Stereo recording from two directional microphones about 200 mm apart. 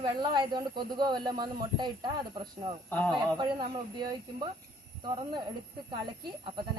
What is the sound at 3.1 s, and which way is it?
Speech, 20° right (ahead or behind).